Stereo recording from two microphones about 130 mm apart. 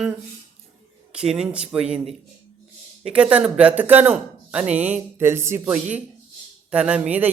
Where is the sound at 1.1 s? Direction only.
5° right (ahead or behind).